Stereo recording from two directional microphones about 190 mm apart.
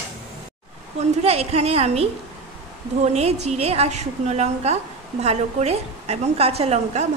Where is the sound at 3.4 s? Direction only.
35° right (ahead or behind).